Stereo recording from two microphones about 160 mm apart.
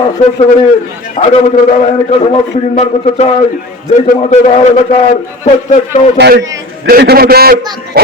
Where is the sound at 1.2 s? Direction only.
55° left (ahead or behind).